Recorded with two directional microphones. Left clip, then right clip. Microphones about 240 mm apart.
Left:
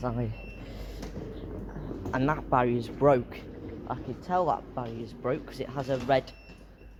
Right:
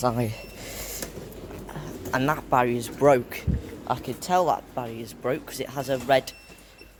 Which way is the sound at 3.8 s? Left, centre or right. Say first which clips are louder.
Right 8 dB; right.